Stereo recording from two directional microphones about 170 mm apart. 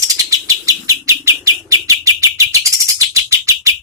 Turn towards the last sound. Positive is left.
turn(degrees=-20)  # may be behind; listen again after turning